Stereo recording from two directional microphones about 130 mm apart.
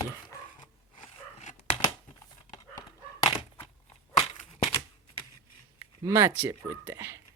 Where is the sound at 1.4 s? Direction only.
65° left (ahead or behind).